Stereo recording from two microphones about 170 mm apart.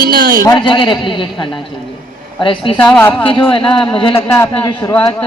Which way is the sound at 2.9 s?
10° left (ahead or behind).